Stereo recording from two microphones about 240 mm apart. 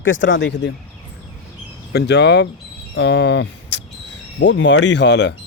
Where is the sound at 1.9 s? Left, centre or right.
Left.